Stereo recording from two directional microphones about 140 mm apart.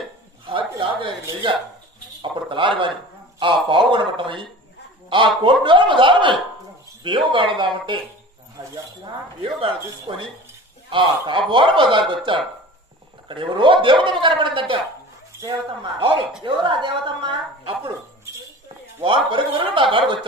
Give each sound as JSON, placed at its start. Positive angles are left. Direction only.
{"t": 0.5, "sound": "speech", "side_deg": -35}
{"t": 19.0, "sound": "speech", "side_deg": -35}